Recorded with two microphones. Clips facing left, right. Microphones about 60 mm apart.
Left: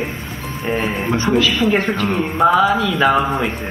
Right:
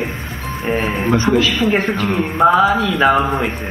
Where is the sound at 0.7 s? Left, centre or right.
Centre.